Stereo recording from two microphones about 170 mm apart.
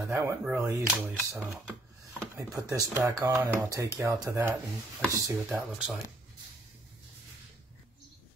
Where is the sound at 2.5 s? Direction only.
20° right (ahead or behind).